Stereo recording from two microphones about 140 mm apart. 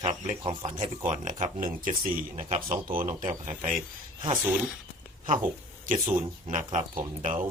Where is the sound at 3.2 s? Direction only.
65° right (ahead or behind).